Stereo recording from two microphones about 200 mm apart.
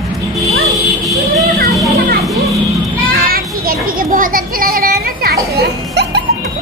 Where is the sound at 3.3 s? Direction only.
45° right (ahead or behind).